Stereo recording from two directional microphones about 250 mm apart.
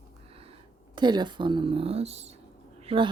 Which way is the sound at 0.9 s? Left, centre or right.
Centre.